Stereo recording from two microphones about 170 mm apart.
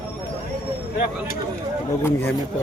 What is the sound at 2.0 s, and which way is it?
Speech, 15° left (ahead or behind).